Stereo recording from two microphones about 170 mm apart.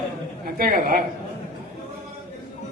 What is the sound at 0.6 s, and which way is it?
Speech, 60° right (ahead or behind).